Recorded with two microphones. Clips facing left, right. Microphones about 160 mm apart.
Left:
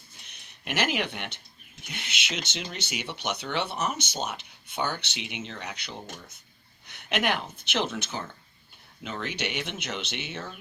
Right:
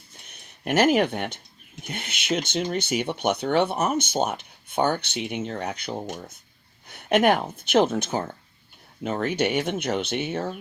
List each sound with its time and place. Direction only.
0.3 s speech: 50° right (ahead or behind)